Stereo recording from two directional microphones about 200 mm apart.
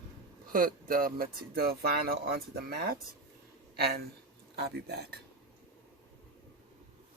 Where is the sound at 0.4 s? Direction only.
45° right (ahead or behind).